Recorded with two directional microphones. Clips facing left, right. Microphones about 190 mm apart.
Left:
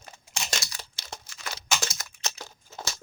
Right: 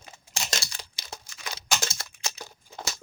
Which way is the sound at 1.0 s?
15° right (ahead or behind).